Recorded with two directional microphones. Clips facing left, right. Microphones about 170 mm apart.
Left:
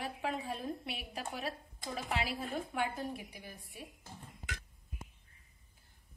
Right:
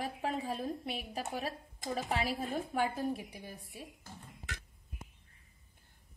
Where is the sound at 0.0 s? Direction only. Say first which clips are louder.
Right 2 dB; 40° right (ahead or behind).